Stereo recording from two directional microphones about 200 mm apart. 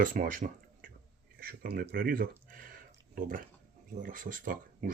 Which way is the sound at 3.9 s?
40° right (ahead or behind).